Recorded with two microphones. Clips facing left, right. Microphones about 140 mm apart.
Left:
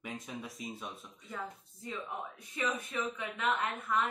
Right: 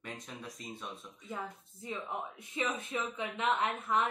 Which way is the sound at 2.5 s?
25° right (ahead or behind).